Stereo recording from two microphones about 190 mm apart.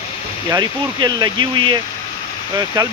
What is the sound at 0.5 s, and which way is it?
Speech, 20° right (ahead or behind).